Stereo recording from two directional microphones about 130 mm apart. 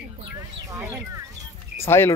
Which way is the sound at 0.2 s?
25° right (ahead or behind).